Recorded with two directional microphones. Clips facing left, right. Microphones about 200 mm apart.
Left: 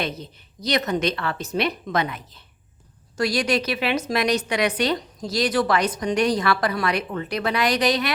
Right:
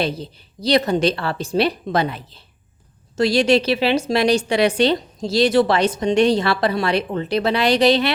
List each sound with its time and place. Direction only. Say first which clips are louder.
0.0 s a woman's voice: right 5 dB; 30° right (ahead or behind)